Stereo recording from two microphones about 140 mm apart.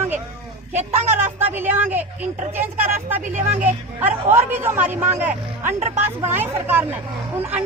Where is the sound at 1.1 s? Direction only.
15° right (ahead or behind).